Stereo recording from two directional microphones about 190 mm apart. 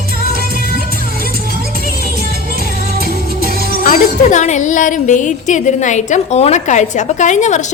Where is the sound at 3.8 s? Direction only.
40° left (ahead or behind).